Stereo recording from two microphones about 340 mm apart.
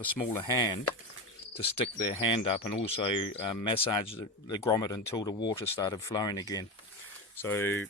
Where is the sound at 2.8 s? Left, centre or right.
Centre.